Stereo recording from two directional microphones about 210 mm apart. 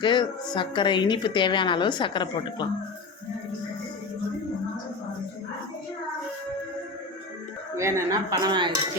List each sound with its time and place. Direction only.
0.0 s a woman's voice: 20° left (ahead or behind)
7.8 s speech: 15° right (ahead or behind)